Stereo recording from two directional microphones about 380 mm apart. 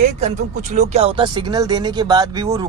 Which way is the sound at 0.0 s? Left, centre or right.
Centre.